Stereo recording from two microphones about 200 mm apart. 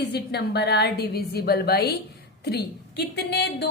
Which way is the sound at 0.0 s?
55° left (ahead or behind).